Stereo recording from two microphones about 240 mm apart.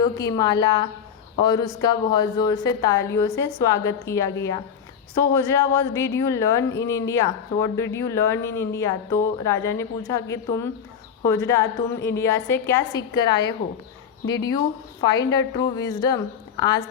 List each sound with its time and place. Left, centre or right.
0.0 s a woman's voice: centre
5.3 s a woman's voice: centre